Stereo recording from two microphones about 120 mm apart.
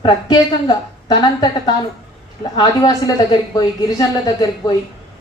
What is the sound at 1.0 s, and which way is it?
Speech, 40° left (ahead or behind).